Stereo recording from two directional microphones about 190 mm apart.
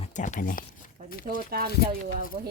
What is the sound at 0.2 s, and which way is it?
Speech, 45° left (ahead or behind).